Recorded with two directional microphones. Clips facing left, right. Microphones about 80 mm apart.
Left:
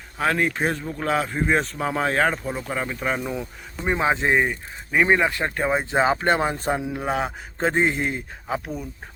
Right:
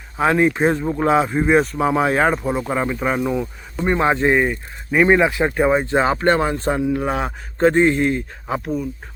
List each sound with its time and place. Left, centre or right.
0.2 s speech: centre
3.8 s a man's voice: centre
5.7 s speech: centre
7.0 s a man's voice: centre